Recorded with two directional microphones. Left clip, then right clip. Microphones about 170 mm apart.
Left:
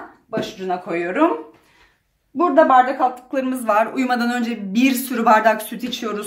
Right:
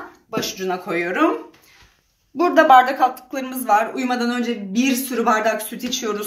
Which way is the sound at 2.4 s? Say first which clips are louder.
Right 1 dB; 20° left (ahead or behind).